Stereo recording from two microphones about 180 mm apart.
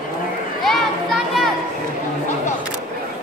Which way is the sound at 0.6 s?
Centre (ahead or behind).